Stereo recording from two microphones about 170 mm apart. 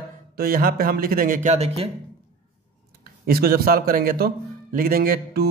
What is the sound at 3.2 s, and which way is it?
A man's voice, 60° right (ahead or behind).